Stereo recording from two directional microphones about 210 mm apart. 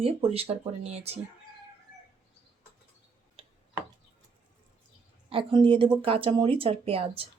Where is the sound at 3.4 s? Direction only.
25° right (ahead or behind).